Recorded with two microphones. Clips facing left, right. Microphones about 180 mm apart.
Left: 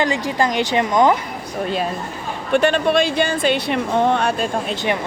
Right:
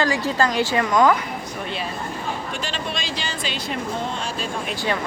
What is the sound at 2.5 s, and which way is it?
Speech, 60° left (ahead or behind).